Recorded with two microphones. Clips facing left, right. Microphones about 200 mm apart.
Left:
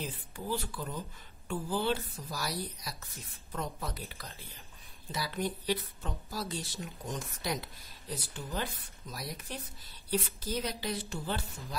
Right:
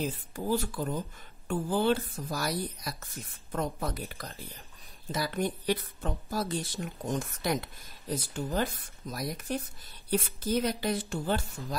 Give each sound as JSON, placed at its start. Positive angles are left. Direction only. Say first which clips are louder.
{"t": 0.0, "sound": "speech", "louder": "right 7 dB", "side_deg": -45}